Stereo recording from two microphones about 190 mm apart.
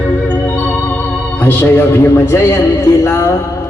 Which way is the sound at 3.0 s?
15° left (ahead or behind).